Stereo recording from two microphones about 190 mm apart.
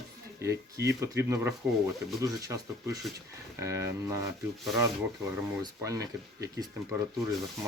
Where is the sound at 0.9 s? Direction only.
15° right (ahead or behind).